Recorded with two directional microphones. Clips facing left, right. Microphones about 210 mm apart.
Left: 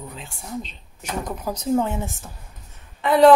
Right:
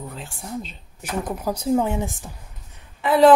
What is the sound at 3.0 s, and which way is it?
Speech, centre (ahead or behind).